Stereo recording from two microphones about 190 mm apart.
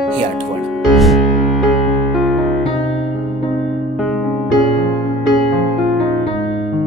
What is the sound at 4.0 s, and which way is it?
Music, centre (ahead or behind).